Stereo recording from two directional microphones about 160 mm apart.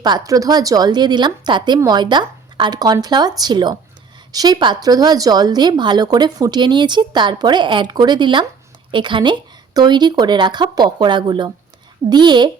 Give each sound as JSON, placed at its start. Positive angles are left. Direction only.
{"t": 0.0, "sound": "speech", "side_deg": -25}